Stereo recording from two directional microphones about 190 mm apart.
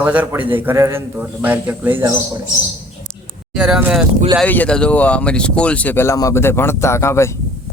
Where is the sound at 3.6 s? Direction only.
Centre (ahead or behind).